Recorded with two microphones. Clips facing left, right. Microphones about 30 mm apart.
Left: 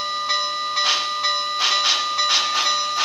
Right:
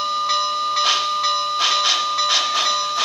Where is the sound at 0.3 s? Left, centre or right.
Centre.